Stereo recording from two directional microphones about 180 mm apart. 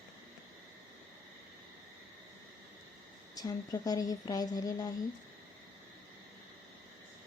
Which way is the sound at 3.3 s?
20° left (ahead or behind).